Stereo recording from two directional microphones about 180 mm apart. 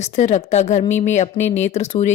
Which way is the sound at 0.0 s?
40° left (ahead or behind).